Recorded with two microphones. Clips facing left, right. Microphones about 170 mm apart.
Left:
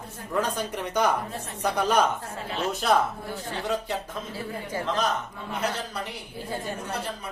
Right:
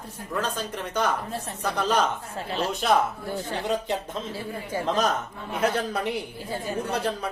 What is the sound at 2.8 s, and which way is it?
Speech, centre (ahead or behind).